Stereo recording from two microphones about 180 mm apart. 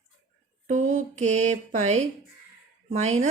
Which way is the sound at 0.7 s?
40° right (ahead or behind).